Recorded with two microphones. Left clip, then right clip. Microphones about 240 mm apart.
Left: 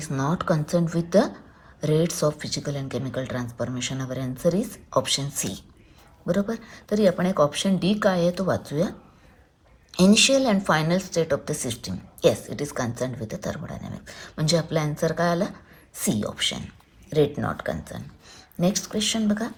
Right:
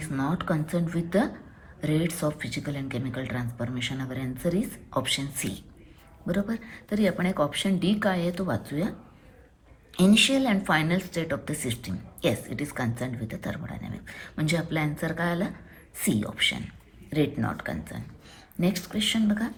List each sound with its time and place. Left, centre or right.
0.0 s a woman's voice: left
9.9 s a woman's voice: centre